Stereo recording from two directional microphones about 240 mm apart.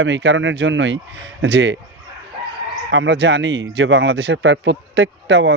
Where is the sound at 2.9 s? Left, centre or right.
Right.